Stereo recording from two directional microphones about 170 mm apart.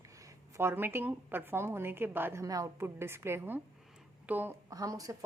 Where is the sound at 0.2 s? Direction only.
20° right (ahead or behind).